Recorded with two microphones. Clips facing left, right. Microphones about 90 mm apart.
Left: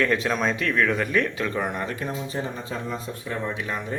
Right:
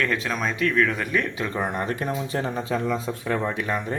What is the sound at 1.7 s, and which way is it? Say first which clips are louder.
Speech: right 3 dB; 45° right (ahead or behind).